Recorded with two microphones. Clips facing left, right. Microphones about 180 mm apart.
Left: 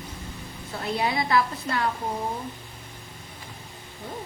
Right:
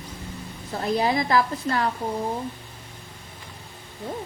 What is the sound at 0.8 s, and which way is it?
Speech, 40° right (ahead or behind).